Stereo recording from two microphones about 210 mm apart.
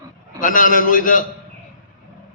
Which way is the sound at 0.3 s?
40° left (ahead or behind).